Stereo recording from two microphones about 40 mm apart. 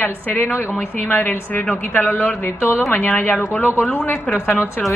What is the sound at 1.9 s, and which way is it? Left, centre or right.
Speech, left.